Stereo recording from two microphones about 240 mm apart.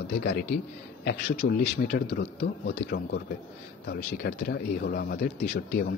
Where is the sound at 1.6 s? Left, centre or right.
Left.